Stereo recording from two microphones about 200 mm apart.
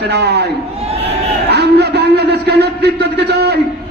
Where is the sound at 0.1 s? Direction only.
55° right (ahead or behind).